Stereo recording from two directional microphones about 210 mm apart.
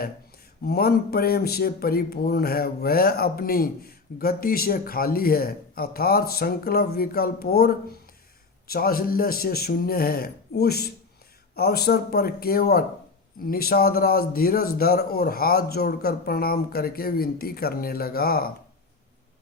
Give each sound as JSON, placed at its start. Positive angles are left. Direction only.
{"t": 0.6, "sound": "speech", "side_deg": 45}